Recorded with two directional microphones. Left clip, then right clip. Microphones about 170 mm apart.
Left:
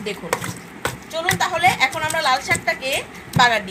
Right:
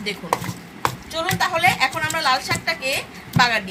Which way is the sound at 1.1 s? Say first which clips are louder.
Left 2 dB; 5° left (ahead or behind).